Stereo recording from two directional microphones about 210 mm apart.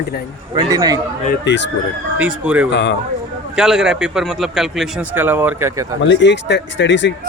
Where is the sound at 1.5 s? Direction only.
55° left (ahead or behind).